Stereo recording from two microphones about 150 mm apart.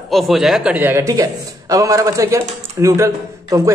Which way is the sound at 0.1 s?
Centre (ahead or behind).